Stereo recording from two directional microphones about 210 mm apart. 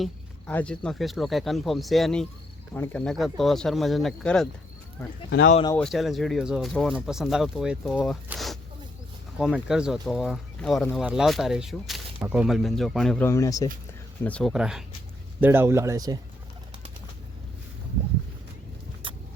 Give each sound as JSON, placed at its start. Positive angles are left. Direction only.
{"t": 0.0, "sound": "speech", "side_deg": 5}
{"t": 5.7, "sound": "speech", "side_deg": 0}
{"t": 8.3, "sound": "a sound", "side_deg": 0}
{"t": 9.4, "sound": "speech", "side_deg": 0}
{"t": 14.3, "sound": "a man's voice", "side_deg": 5}
{"t": 19.0, "sound": "vehicle", "side_deg": -25}